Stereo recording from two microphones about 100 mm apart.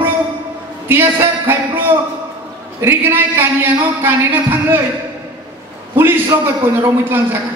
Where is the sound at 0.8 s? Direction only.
25° right (ahead or behind).